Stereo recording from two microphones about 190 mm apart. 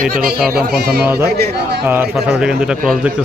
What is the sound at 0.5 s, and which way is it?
Speech, 55° right (ahead or behind).